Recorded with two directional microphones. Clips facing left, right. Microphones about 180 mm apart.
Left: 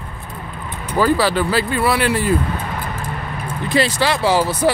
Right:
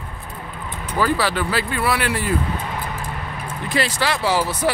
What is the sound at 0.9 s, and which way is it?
Speech, 35° left (ahead or behind).